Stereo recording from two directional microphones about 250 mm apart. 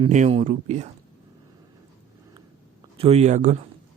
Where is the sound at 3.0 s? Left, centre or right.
Right.